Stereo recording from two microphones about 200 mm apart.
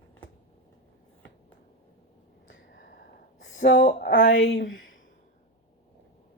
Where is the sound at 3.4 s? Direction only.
65° left (ahead or behind).